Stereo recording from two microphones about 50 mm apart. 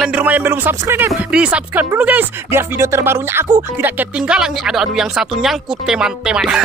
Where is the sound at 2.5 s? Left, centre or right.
Right.